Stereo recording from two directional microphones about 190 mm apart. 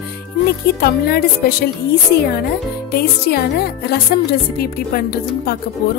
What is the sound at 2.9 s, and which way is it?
Speech, 55° left (ahead or behind).